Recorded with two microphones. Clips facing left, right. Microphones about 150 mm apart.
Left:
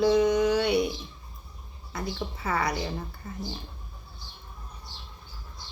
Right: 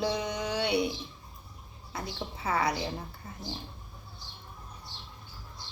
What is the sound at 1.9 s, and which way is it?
Speech, 30° right (ahead or behind).